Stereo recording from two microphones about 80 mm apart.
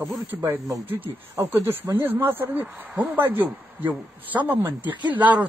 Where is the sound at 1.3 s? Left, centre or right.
Right.